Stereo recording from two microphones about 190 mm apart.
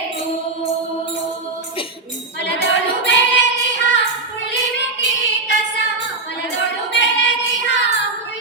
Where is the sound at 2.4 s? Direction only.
70° left (ahead or behind).